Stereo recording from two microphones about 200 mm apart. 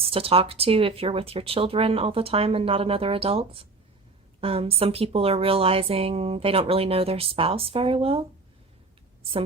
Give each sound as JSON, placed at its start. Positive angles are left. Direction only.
{"t": 0.0, "sound": "a woman's voice", "side_deg": -30}